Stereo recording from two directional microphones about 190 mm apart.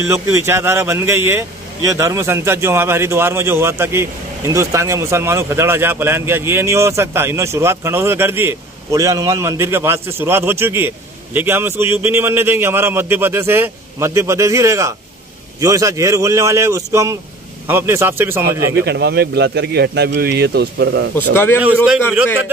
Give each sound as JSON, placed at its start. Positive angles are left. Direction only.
{"t": 0.0, "sound": "speech", "side_deg": -15}
{"t": 18.9, "sound": "speech", "side_deg": -60}
{"t": 21.3, "sound": "a man's voice", "side_deg": 10}